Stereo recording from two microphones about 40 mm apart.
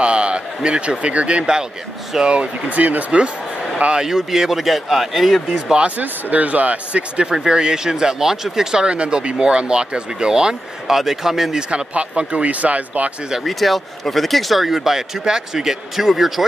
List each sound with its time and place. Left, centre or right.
0.0 s a sound: right
0.6 s speech: right
2.7 s speech: right
4.0 s speech: centre
5.9 s speech: right
7.3 s speech: centre
8.8 s speech: right
10.9 s speech: centre
11.7 s speech: right
13.4 s speech: centre